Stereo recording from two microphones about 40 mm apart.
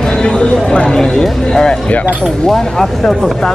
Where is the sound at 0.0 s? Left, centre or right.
Left.